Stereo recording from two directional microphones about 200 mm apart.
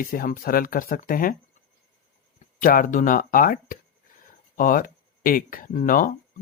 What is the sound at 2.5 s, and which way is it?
Speech, 40° left (ahead or behind).